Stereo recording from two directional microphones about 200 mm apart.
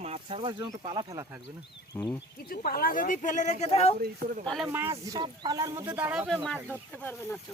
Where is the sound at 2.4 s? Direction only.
50° left (ahead or behind); by 3.9 s 30° left (ahead or behind).